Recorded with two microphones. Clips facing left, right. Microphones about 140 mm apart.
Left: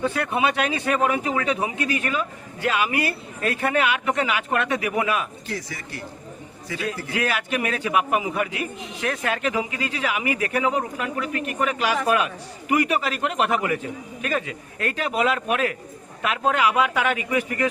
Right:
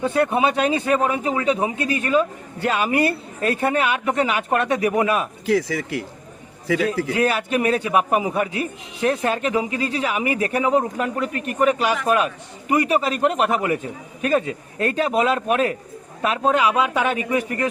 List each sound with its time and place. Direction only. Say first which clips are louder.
0.3 s a man's voice: right 3 dB; 35° right (ahead or behind)
5.5 s speech: right 12 dB; 90° right
6.8 s a man's voice: right 3 dB; 35° right (ahead or behind)